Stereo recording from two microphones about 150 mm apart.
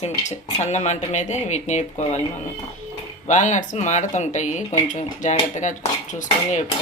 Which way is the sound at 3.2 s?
50° left (ahead or behind).